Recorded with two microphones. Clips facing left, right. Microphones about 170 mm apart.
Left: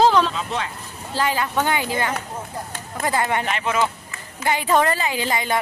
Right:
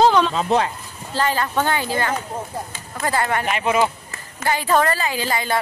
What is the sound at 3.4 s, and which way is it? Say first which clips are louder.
Speech: right 3 dB; 15° right (ahead or behind).